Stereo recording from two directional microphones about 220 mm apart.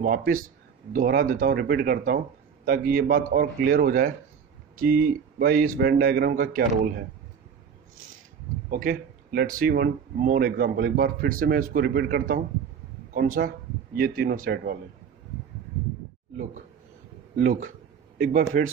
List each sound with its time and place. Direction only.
0.0 s speech: 40° right (ahead or behind)
8.6 s speech: 40° right (ahead or behind)
17.4 s speech: 35° right (ahead or behind)